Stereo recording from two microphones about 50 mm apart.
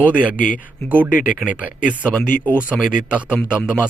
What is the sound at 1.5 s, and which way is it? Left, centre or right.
Speech, right.